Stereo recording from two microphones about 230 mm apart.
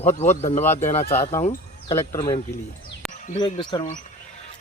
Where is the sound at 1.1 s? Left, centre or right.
Centre.